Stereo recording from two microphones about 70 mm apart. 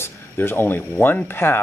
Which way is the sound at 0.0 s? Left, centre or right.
Left.